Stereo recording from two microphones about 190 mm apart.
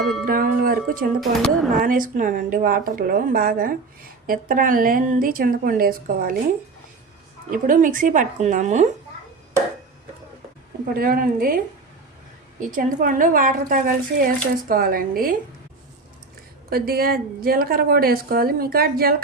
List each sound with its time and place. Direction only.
0.0 s speech: centre (ahead or behind)
0.3 s speech: 45° right (ahead or behind)
1.2 s speech: centre (ahead or behind)
1.8 s speech: 45° right (ahead or behind)
7.5 s speech: 45° right (ahead or behind)
10.9 s speech: 50° right (ahead or behind)
16.6 s speech: 50° right (ahead or behind)